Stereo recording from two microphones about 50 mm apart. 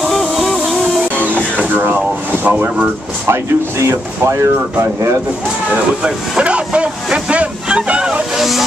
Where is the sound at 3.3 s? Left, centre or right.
Right.